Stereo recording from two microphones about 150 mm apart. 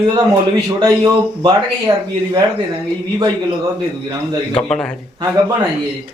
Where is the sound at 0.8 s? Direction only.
30° right (ahead or behind).